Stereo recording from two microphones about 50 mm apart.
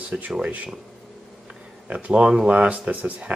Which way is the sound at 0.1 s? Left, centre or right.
Right.